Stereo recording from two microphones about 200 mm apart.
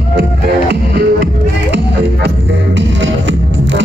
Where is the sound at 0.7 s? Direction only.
60° right (ahead or behind).